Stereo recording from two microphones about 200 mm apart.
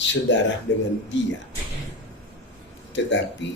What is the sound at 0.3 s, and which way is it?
Speech, 65° left (ahead or behind).